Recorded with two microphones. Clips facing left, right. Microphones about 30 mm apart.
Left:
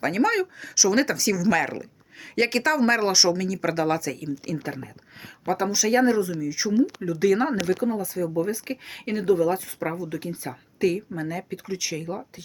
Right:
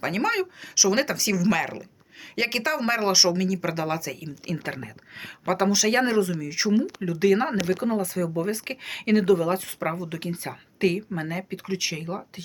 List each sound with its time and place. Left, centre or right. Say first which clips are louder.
0.0 s speech: left 2 dB; centre
1.5 s speech: left 3 dB; centre
4.7 s speech: right 1 dB; right
7.2 s speech: even; right
7.9 s speech: right 1 dB; right
8.4 s speech: left 1 dB; right
8.8 s speech: right 6 dB; right
9.4 s speech: left 2 dB; right
11.3 s speech: even; right